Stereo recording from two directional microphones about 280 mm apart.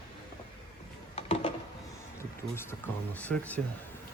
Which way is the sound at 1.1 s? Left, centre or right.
Left.